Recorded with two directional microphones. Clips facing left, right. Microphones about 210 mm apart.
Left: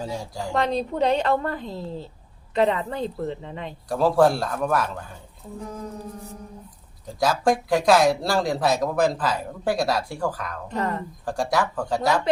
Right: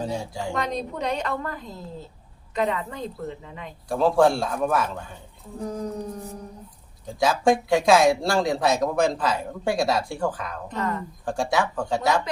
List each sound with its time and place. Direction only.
0.0 s speech: centre (ahead or behind)
0.5 s a woman's voice: 30° left (ahead or behind)
3.8 s speech: centre (ahead or behind)
5.6 s music: 35° right (ahead or behind)
7.2 s speech: centre (ahead or behind)